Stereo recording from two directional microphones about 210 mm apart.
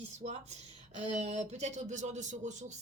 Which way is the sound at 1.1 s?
35° right (ahead or behind).